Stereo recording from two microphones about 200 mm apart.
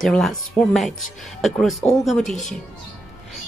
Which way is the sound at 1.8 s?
15° left (ahead or behind).